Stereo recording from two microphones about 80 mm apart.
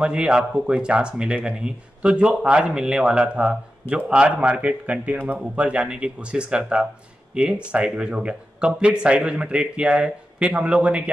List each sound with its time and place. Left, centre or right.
0.0 s speech: centre